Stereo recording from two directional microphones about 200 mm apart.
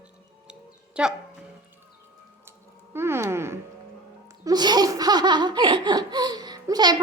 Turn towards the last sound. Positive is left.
turn(degrees=-20)  # may be behind; listen again after turning